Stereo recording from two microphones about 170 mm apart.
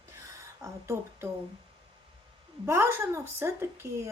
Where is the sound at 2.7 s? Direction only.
15° right (ahead or behind).